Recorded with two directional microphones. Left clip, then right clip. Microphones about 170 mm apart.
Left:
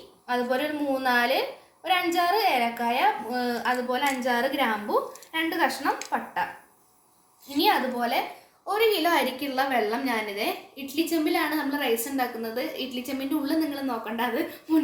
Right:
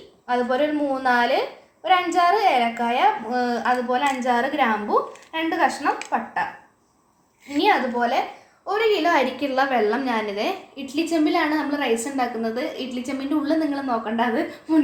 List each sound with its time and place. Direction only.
0.3 s a woman's voice: 35° right (ahead or behind)
7.5 s a woman's voice: 35° right (ahead or behind); by 14.3 s 50° right (ahead or behind)